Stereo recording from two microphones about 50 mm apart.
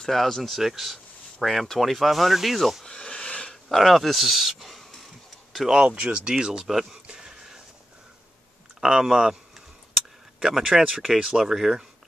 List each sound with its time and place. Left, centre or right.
0.0 s speech: centre
2.8 s a sound: centre
3.6 s speech: centre
5.8 s speech: right; by 7.0 s centre
7.1 s a sound: centre
8.8 s speech: centre
10.4 s speech: centre